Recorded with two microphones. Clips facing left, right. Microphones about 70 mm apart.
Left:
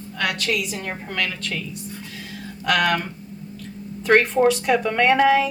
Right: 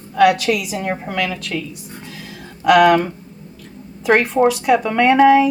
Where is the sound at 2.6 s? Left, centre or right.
Centre.